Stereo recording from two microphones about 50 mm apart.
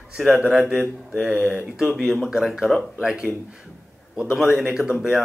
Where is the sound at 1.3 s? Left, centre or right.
Right.